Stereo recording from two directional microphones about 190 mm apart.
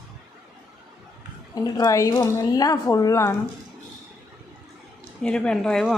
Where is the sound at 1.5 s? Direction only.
20° left (ahead or behind).